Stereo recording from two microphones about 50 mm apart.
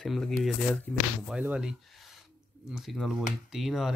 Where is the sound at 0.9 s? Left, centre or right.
Left.